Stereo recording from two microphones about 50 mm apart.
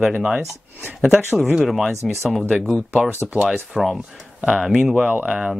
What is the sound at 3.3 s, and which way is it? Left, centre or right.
Speech, centre.